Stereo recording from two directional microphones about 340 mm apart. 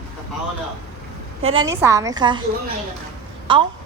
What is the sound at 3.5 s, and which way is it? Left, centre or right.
Speech, centre.